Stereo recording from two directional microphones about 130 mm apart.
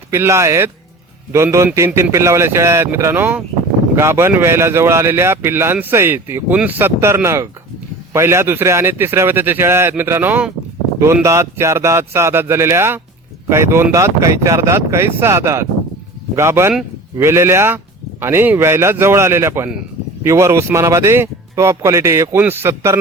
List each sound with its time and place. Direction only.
0.1 s speech: 20° right (ahead or behind)